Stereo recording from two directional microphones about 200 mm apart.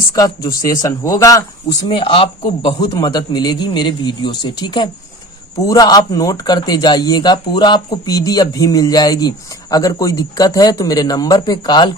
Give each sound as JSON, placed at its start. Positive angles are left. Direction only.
{"t": 0.2, "sound": "speech", "side_deg": 20}